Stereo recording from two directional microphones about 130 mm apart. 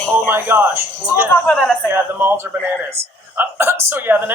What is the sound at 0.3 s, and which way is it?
A man's voice, 15° right (ahead or behind).